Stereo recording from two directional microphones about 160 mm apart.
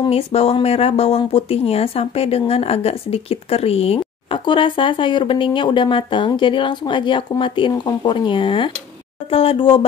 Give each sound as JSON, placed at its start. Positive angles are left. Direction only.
{"t": 0.0, "sound": "speech", "side_deg": 40}